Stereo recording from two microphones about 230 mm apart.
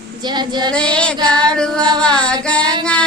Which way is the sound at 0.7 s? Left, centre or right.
Centre.